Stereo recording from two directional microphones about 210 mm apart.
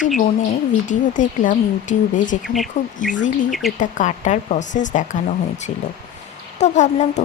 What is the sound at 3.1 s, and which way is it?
A woman's voice, 35° left (ahead or behind).